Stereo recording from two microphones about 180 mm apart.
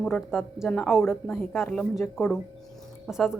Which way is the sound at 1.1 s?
15° left (ahead or behind).